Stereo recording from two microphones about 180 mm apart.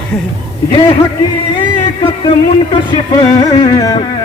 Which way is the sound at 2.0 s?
25° left (ahead or behind).